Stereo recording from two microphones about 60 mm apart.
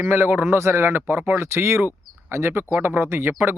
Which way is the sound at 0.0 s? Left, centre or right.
Right.